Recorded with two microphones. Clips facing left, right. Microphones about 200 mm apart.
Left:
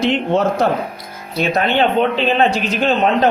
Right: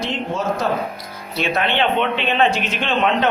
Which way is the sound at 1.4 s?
40° left (ahead or behind).